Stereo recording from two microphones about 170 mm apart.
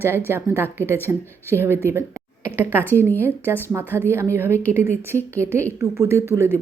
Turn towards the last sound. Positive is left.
turn(degrees=-15)  # may be behind; listen again after turning